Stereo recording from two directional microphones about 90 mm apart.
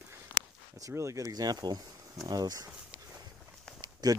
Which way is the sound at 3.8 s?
50° right (ahead or behind).